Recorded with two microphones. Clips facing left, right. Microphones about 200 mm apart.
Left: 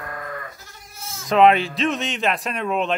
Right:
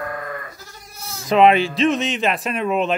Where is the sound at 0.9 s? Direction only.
35° right (ahead or behind).